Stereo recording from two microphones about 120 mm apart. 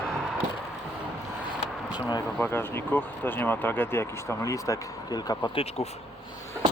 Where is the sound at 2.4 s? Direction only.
20° left (ahead or behind).